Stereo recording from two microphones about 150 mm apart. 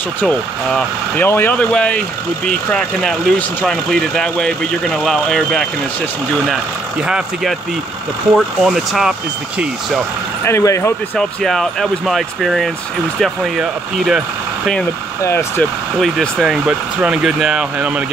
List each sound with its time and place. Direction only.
0.2 s speech: 10° left (ahead or behind)
10.4 s speech: 20° left (ahead or behind)
11.1 s speech: 5° left (ahead or behind)
15.2 s speech: 15° left (ahead or behind)
16.0 s speech: centre (ahead or behind)